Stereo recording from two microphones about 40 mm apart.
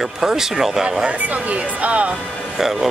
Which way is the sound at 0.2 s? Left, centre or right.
Centre.